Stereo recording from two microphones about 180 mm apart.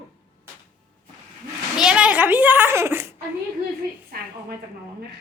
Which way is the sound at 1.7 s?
5° right (ahead or behind).